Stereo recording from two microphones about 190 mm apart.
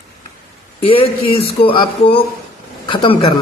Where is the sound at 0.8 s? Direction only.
30° left (ahead or behind).